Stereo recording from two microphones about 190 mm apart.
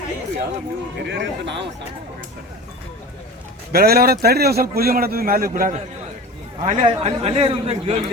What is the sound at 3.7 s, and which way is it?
A man's voice, 55° right (ahead or behind).